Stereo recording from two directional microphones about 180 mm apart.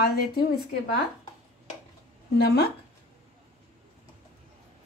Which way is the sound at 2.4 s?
65° left (ahead or behind).